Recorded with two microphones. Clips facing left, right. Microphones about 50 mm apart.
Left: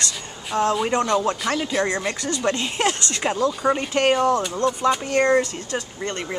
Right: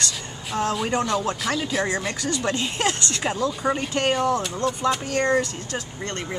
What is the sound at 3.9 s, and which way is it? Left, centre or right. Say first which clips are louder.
Speech: left 4 dB; left.